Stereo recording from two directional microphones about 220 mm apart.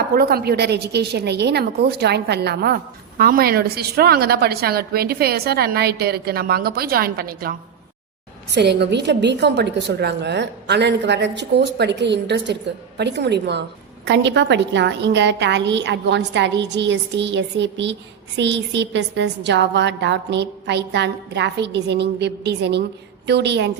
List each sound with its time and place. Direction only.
0.1 s a woman's voice: 45° right (ahead or behind)